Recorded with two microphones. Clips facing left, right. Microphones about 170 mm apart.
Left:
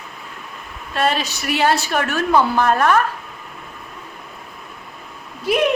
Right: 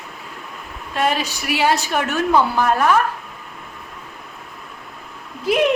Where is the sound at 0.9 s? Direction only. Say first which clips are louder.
Even; 15° right (ahead or behind).